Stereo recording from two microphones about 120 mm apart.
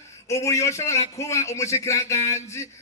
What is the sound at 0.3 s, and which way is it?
A man's voice, 25° left (ahead or behind).